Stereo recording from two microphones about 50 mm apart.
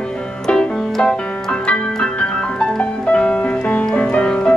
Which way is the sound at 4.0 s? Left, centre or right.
Left.